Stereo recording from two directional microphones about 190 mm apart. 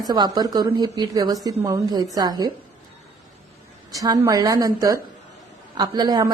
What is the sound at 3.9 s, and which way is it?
A woman's voice, 20° right (ahead or behind).